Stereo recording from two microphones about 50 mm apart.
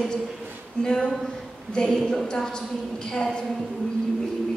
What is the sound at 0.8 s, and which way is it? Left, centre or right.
A woman's voice, centre.